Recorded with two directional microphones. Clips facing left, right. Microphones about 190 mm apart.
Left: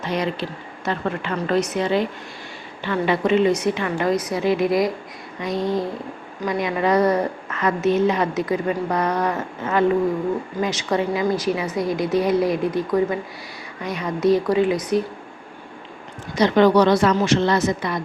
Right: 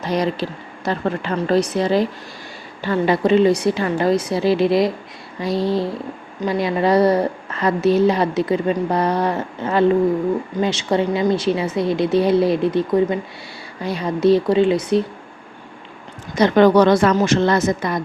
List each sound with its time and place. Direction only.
0.0 s a woman's voice: 40° right (ahead or behind)
16.3 s a woman's voice: 50° right (ahead or behind)